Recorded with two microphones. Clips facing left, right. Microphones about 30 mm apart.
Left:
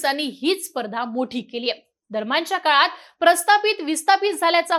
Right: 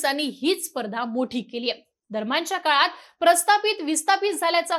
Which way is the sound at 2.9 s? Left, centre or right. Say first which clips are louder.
Left 2 dB; left.